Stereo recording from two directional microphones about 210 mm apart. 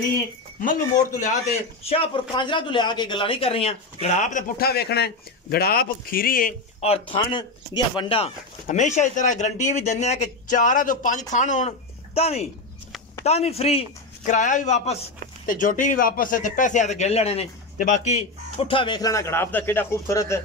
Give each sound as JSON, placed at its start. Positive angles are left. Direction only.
{"t": 0.6, "sound": "speech", "side_deg": 40}
{"t": 1.9, "sound": "speech", "side_deg": 25}
{"t": 6.8, "sound": "speech", "side_deg": 25}
{"t": 8.6, "sound": "speech", "side_deg": 35}